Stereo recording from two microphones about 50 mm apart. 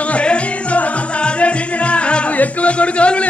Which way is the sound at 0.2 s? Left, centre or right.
Left.